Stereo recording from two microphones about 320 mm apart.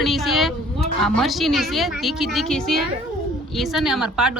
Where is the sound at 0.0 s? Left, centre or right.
Centre.